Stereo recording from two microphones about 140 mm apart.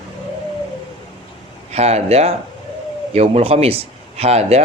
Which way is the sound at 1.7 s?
50° right (ahead or behind).